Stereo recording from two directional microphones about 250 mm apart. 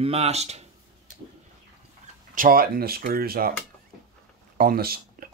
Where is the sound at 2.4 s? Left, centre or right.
Right.